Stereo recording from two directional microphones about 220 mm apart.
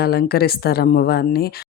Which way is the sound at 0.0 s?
45° left (ahead or behind).